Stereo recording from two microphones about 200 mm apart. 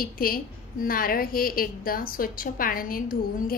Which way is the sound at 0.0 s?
45° left (ahead or behind).